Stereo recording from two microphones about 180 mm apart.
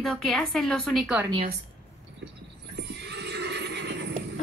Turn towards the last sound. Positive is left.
turn(degrees=-70)  # may be behind; listen again after turning